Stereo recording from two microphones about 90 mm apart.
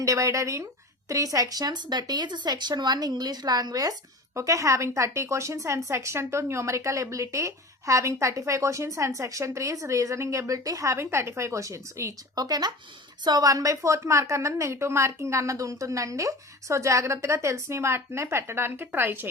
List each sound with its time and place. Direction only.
0.0 s a woman's voice: 35° right (ahead or behind)
12.4 s a woman's voice: 50° right (ahead or behind); by 19.3 s 25° right (ahead or behind)